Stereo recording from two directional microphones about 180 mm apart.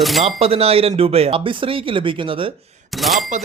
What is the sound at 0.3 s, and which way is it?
A man's voice, 35° right (ahead or behind).